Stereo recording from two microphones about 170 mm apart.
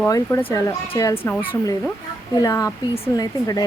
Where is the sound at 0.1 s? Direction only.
15° left (ahead or behind).